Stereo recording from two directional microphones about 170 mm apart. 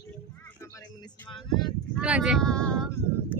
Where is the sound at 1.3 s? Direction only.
25° left (ahead or behind).